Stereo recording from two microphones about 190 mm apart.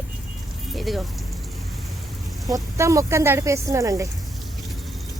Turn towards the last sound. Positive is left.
turn(degrees=-15)  # may be behind; listen again after turning